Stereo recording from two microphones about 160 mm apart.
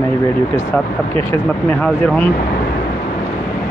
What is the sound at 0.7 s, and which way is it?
Speech, 10° left (ahead or behind).